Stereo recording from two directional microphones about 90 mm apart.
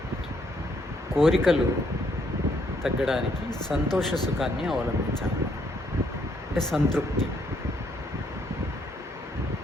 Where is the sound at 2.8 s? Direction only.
Centre (ahead or behind).